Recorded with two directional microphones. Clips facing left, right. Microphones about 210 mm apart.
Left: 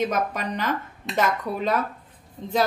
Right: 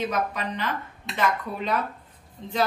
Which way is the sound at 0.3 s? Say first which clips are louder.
Left 3 dB; 45° left (ahead or behind).